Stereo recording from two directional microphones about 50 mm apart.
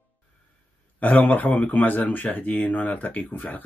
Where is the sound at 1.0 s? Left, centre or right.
Left.